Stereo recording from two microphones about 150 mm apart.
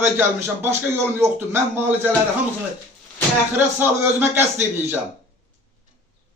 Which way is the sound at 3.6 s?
15° right (ahead or behind).